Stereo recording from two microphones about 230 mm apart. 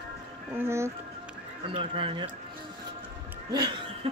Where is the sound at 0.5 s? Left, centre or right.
Centre.